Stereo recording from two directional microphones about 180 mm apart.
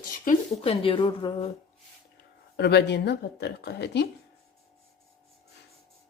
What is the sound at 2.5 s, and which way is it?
Speech, 65° left (ahead or behind).